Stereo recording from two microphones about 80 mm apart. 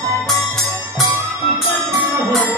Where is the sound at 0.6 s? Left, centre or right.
Right.